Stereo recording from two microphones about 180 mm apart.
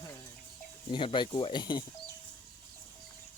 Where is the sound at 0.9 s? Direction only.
25° left (ahead or behind).